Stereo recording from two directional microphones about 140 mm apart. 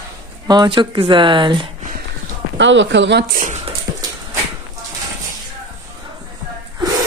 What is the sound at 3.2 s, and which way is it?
Speech, 90° right.